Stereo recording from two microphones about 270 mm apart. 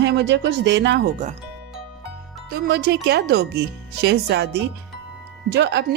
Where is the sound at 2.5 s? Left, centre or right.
Right.